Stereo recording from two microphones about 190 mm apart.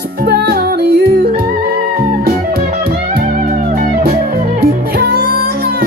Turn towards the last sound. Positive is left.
turn(degrees=-55)  # may be behind; listen again after turning